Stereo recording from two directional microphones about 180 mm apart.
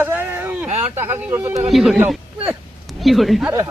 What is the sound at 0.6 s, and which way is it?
Speech, 40° right (ahead or behind).